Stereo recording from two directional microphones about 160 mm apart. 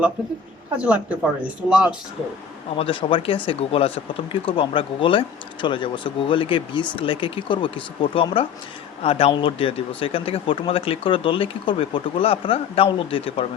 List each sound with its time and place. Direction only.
0.9 s speech: 10° right (ahead or behind)
2.7 s speech: 35° left (ahead or behind)